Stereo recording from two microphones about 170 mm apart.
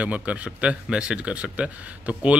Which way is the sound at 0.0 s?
10° right (ahead or behind).